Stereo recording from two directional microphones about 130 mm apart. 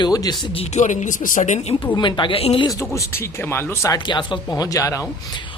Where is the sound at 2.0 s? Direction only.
35° left (ahead or behind).